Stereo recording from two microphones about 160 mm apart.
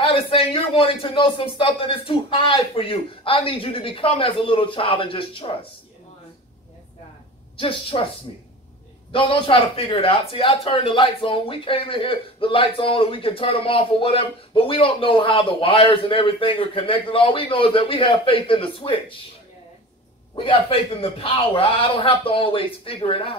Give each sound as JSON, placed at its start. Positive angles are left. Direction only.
{"t": 0.0, "sound": "speech", "side_deg": 35}
{"t": 7.5, "sound": "speech", "side_deg": 35}
{"t": 9.1, "sound": "speech", "side_deg": 35}
{"t": 20.3, "sound": "speech", "side_deg": 35}